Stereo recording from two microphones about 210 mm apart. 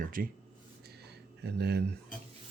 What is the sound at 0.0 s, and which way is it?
Speech, 40° right (ahead or behind).